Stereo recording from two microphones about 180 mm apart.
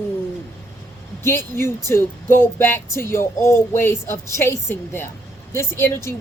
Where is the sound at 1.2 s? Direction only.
15° left (ahead or behind).